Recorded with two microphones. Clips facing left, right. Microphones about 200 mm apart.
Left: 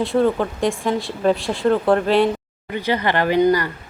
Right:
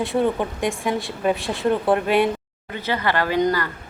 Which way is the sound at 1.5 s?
15° right (ahead or behind).